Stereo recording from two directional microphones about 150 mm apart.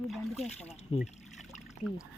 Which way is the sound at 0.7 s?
45° left (ahead or behind).